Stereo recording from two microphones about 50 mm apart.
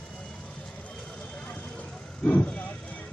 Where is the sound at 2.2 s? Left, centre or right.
Left.